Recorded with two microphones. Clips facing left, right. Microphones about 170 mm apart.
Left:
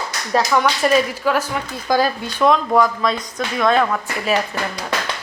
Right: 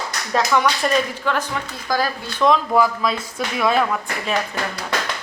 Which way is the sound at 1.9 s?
20° left (ahead or behind).